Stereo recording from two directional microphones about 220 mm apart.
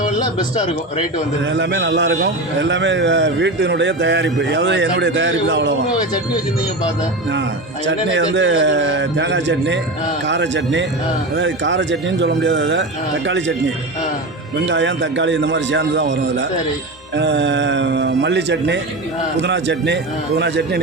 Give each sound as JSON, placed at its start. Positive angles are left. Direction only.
{"t": 1.5, "sound": "a man's voice", "side_deg": -55}
{"t": 7.9, "sound": "a man's voice", "side_deg": -55}
{"t": 14.6, "sound": "a man's voice", "side_deg": -55}